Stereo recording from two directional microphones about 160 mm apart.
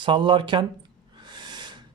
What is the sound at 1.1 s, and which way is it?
Snort, 25° right (ahead or behind).